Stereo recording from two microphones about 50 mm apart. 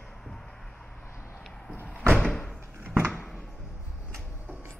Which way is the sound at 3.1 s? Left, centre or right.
Centre.